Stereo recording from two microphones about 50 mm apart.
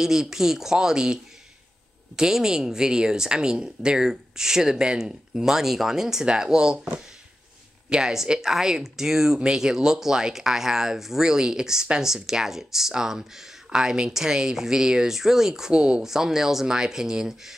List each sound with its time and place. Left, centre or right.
0.0 s speech: centre
7.9 s speech: centre